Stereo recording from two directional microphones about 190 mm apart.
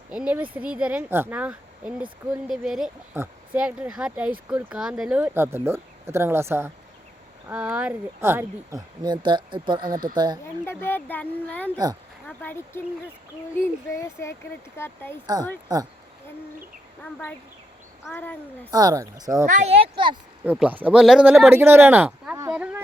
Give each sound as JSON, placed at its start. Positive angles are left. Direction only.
{"t": 0.1, "sound": "speech", "side_deg": -5}
{"t": 9.0, "sound": "speech", "side_deg": -25}
{"t": 10.0, "sound": "speech", "side_deg": -50}
{"t": 10.7, "sound": "speech", "side_deg": 10}
{"t": 15.7, "sound": "speech", "side_deg": -20}
{"t": 17.0, "sound": "speech", "side_deg": 10}
{"t": 18.7, "sound": "speech", "side_deg": -20}
{"t": 19.5, "sound": "speech", "side_deg": -30}
{"t": 20.4, "sound": "speech", "side_deg": -10}